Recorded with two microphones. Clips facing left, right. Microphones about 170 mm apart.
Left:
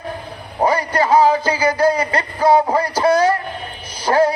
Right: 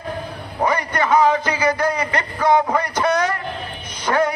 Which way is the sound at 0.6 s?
30° left (ahead or behind).